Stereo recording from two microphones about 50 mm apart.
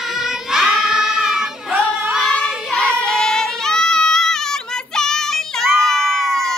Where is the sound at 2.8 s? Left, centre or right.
Left.